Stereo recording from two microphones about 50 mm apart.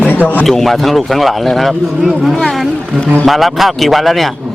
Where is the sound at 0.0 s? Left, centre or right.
Left.